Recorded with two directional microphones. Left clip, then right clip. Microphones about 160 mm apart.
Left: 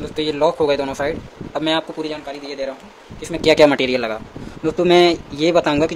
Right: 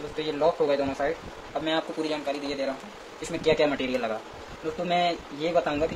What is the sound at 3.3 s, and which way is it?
Speech, 65° left (ahead or behind).